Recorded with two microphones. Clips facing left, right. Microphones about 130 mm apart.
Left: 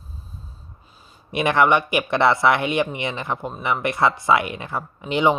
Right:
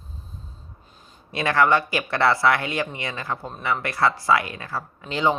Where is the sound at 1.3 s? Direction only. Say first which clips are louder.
Left 2 dB; 20° left (ahead or behind).